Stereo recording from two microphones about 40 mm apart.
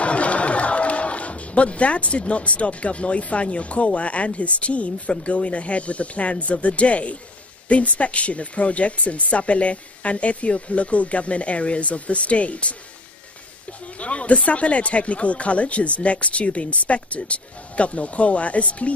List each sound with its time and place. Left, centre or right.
0.0 s speech: left